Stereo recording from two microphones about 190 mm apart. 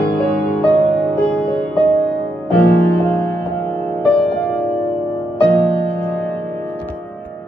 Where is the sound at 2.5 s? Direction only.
5° left (ahead or behind).